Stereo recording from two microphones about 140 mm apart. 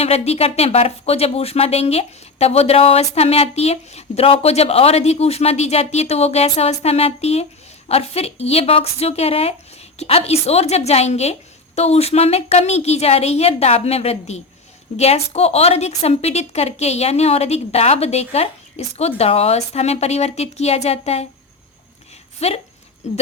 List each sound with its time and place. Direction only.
0.0 s speech: 45° left (ahead or behind)
22.4 s speech: 45° left (ahead or behind)